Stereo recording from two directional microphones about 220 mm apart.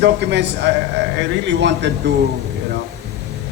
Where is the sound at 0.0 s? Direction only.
50° right (ahead or behind).